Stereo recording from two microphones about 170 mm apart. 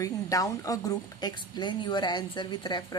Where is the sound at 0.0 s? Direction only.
20° left (ahead or behind).